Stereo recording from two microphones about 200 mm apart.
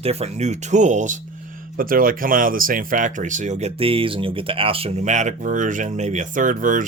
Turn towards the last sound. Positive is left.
turn(degrees=-40)  # may be behind; listen again after turning